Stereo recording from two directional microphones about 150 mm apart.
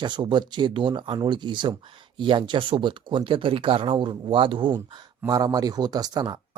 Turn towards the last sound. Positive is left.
turn(degrees=-25)  # may be behind; listen again after turning